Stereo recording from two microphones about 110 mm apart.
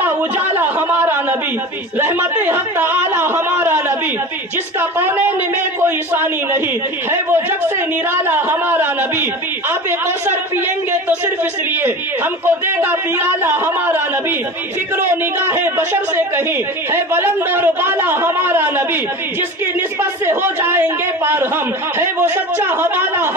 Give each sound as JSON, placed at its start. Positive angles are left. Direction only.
{"t": 0.6, "sound": "a sound", "side_deg": -20}
{"t": 4.7, "sound": "a woman's voice", "side_deg": -20}
{"t": 12.4, "sound": "a man's voice", "side_deg": -20}
{"t": 20.0, "sound": "a man's voice", "side_deg": -20}